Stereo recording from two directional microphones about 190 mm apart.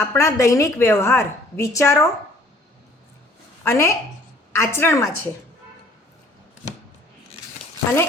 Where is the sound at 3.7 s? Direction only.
15° left (ahead or behind).